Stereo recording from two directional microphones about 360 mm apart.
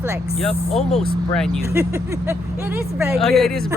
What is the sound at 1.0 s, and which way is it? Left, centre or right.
Speech, centre.